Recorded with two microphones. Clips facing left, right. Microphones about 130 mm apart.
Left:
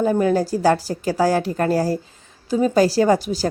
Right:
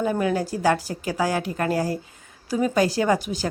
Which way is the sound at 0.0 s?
35° left (ahead or behind).